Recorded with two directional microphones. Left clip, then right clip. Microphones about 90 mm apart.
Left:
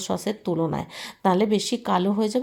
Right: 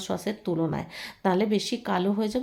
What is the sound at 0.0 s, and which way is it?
A woman's voice, 35° left (ahead or behind).